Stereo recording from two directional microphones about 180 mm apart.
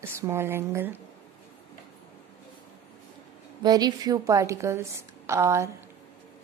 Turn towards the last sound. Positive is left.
turn(degrees=-15)  # may be behind; listen again after turning